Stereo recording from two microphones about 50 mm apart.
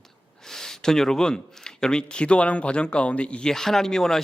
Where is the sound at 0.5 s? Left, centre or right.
Centre.